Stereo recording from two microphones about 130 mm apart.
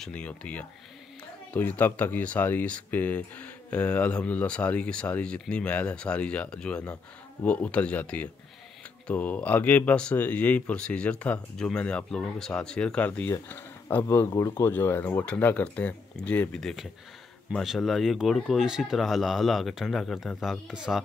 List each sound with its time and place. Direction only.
0.0 s speech: 10° left (ahead or behind)